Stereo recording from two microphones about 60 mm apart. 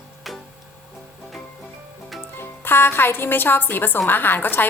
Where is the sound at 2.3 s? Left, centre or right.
Left.